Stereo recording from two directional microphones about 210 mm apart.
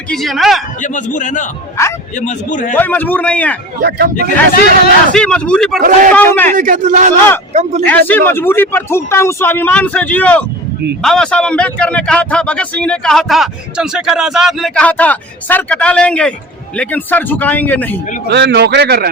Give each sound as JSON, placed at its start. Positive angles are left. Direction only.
{"t": 0.1, "sound": "speech", "side_deg": 0}
{"t": 0.8, "sound": "a man's voice", "side_deg": 35}
{"t": 1.7, "sound": "a man's voice", "side_deg": 15}
{"t": 2.1, "sound": "a man's voice", "side_deg": 35}
{"t": 2.7, "sound": "speech", "side_deg": 10}
{"t": 3.8, "sound": "speech", "side_deg": -50}
{"t": 4.1, "sound": "a man's voice", "side_deg": 40}
{"t": 5.1, "sound": "speech", "side_deg": 5}
{"t": 6.5, "sound": "speech", "side_deg": -40}
{"t": 7.9, "sound": "speech", "side_deg": 10}
{"t": 18.3, "sound": "speech", "side_deg": -55}